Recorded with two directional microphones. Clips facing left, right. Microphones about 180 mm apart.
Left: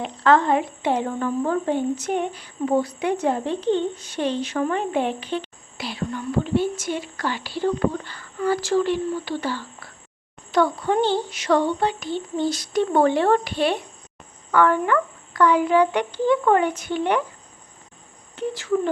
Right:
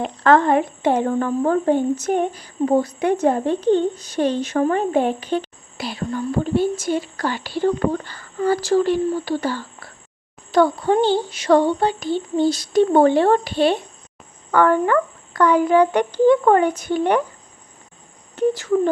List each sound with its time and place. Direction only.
0.2 s a woman's voice: 50° right (ahead or behind); by 13.7 s 30° right (ahead or behind)
14.5 s a woman's voice: 45° right (ahead or behind)
18.3 s speech: 40° right (ahead or behind)